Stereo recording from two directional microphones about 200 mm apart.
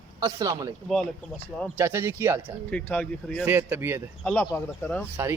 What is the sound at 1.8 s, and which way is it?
Speech, 10° right (ahead or behind).